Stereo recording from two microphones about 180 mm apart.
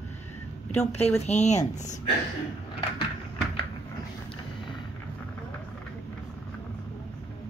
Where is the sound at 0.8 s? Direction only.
35° left (ahead or behind).